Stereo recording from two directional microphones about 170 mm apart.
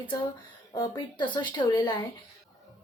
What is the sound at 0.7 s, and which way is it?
Speech, 25° left (ahead or behind).